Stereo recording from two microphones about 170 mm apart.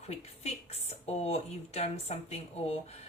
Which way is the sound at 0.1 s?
40° left (ahead or behind).